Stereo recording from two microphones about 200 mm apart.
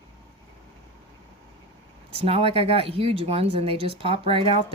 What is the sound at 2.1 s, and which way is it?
Speech, 30° right (ahead or behind).